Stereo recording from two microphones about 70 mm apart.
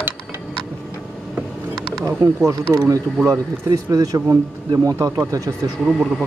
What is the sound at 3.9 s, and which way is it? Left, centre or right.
Speech, right.